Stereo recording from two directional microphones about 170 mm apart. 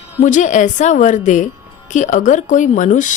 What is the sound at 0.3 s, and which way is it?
Speech, 45° left (ahead or behind).